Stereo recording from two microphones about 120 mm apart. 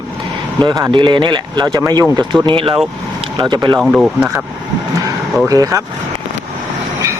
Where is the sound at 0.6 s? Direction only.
35° right (ahead or behind).